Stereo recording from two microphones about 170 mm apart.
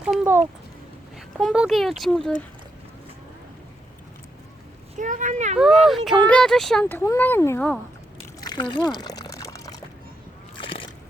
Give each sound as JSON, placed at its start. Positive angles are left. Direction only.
{"t": 0.1, "sound": "speech", "side_deg": 0}
{"t": 1.4, "sound": "speech", "side_deg": 0}
{"t": 4.9, "sound": "speech", "side_deg": -50}
{"t": 5.5, "sound": "speech", "side_deg": -5}
{"t": 8.4, "sound": "pour", "side_deg": 25}
{"t": 10.6, "sound": "slosh", "side_deg": 30}